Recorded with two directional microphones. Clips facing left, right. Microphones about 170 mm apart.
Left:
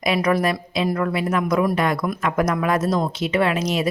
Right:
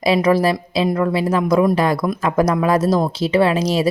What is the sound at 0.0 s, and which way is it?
A woman's voice, 30° right (ahead or behind).